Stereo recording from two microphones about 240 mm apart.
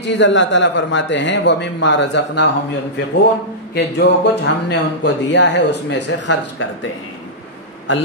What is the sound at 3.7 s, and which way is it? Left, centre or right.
A man's voice, left.